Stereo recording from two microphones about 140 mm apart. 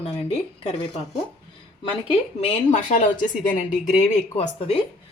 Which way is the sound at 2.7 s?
65° left (ahead or behind).